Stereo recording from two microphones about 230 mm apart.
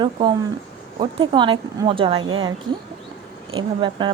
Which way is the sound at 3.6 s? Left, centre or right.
Right.